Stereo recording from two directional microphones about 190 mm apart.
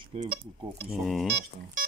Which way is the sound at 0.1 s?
35° right (ahead or behind).